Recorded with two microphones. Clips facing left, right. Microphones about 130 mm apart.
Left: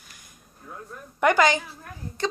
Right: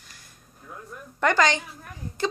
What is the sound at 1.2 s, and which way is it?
Speech, 10° left (ahead or behind).